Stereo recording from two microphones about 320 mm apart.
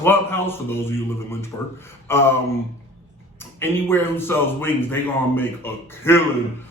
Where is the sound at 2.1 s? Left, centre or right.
Centre.